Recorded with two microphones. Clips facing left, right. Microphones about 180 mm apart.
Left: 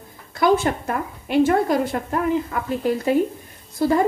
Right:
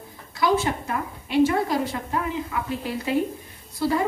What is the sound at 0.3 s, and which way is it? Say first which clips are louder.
A woman's voice: left 4 dB; 55° left (ahead or behind).